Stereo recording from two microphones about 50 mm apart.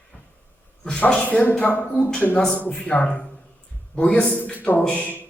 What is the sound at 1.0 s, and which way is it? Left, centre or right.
Speech, left.